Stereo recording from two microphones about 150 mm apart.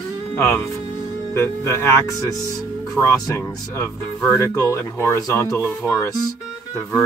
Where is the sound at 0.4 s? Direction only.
20° left (ahead or behind).